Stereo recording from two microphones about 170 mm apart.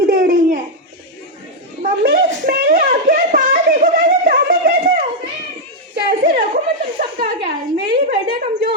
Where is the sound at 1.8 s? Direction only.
55° right (ahead or behind).